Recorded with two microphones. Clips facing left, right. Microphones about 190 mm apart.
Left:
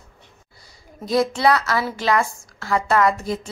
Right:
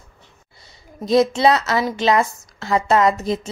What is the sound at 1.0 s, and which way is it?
A woman's voice, 20° right (ahead or behind).